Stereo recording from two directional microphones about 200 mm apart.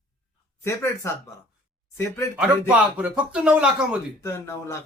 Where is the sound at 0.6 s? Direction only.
15° left (ahead or behind).